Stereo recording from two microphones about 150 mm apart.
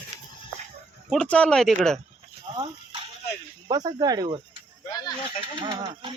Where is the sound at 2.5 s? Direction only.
40° right (ahead or behind).